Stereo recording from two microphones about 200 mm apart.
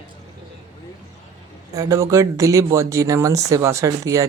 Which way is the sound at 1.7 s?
15° right (ahead or behind).